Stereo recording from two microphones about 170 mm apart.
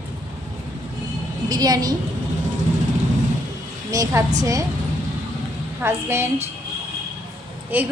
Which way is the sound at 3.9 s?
20° right (ahead or behind).